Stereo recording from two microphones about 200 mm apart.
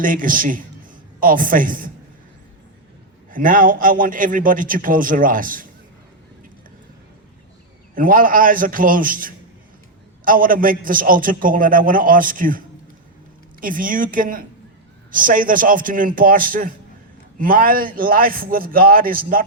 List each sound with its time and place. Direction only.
0.0 s a man's voice: 45° right (ahead or behind)
3.3 s a man's voice: 45° right (ahead or behind)
7.9 s a man's voice: 45° right (ahead or behind)